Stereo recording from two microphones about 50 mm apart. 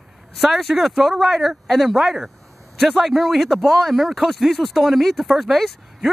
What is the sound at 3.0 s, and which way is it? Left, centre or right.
Speech, centre.